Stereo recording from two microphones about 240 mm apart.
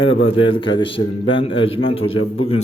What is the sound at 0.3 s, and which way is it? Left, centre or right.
A man's voice, left.